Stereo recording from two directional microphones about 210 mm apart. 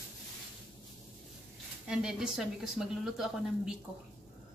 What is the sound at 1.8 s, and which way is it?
Speech, 5° right (ahead or behind).